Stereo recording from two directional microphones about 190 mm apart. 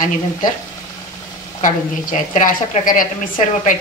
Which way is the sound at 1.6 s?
45° left (ahead or behind).